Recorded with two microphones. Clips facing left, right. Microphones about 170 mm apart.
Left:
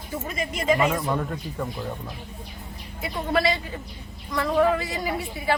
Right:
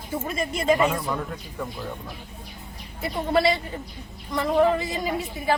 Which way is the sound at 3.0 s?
25° right (ahead or behind).